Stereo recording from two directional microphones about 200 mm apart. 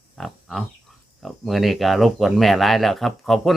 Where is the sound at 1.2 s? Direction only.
Centre (ahead or behind).